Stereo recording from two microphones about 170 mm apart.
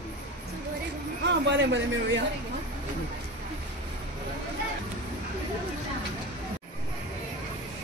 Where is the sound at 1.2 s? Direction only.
90° right.